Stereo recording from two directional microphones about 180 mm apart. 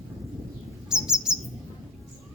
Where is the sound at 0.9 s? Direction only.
5° right (ahead or behind).